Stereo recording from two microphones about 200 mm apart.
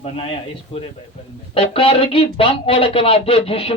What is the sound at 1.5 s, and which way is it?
Speech, 25° left (ahead or behind).